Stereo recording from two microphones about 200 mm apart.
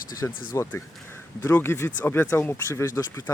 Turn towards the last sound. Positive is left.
turn(degrees=15)  # may be behind; listen again after turning